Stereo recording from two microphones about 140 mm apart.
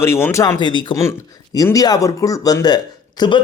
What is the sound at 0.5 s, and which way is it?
Speech, 35° left (ahead or behind).